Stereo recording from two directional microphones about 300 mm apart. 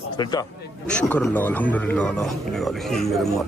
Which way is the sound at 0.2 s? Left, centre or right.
Centre.